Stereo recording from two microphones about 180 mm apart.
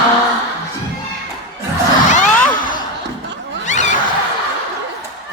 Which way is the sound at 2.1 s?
45° left (ahead or behind).